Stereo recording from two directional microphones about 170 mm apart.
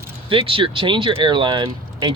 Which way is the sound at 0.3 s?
30° right (ahead or behind).